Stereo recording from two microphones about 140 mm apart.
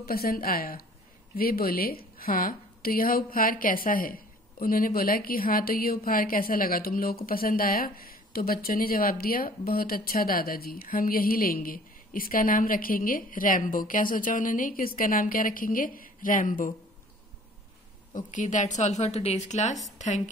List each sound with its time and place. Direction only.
0.0 s a woman's voice: 90° left
18.1 s a woman's voice: 65° left (ahead or behind)